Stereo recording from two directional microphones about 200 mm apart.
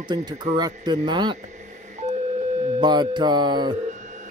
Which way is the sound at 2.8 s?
20° right (ahead or behind).